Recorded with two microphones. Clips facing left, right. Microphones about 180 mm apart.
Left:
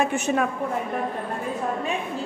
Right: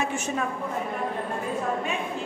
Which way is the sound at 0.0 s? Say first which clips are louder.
Left 5 dB; 60° left (ahead or behind).